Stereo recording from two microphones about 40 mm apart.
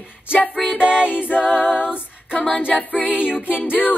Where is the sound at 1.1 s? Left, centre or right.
Left.